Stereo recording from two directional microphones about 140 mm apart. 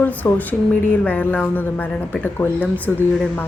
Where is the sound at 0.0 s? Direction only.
10° left (ahead or behind).